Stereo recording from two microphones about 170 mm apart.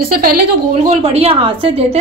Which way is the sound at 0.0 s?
60° right (ahead or behind).